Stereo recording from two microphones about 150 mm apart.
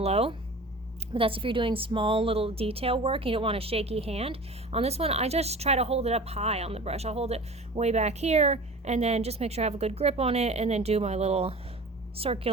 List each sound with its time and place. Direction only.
0.0 s speech: 40° right (ahead or behind)